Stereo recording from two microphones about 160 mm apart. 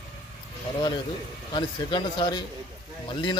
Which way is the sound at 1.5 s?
30° left (ahead or behind).